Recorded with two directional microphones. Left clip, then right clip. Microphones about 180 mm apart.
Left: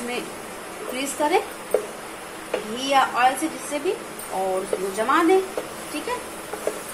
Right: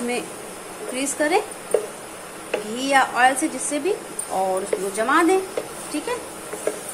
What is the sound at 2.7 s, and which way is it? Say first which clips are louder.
Speech: right 1 dB; 25° right (ahead or behind).